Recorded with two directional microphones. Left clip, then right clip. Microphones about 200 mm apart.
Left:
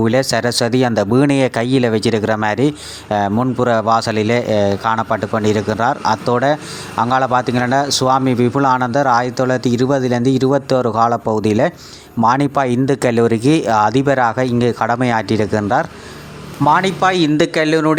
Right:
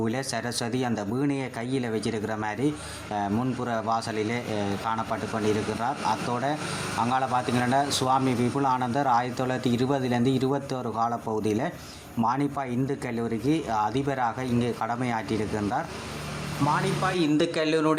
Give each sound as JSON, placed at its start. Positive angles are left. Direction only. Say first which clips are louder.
{"t": 0.0, "sound": "speech", "louder": "left 14 dB", "side_deg": 40}